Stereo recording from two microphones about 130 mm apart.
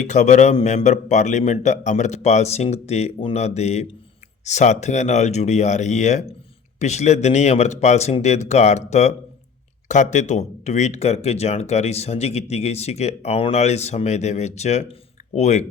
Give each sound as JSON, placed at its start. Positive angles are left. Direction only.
{"t": 0.0, "sound": "speech", "side_deg": 65}